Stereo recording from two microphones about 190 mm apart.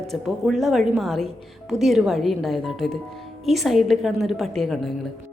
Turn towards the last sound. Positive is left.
turn(degrees=0)  # may be behind; listen again after turning